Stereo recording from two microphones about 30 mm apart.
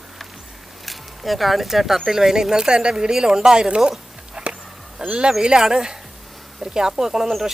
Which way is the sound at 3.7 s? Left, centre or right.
Right.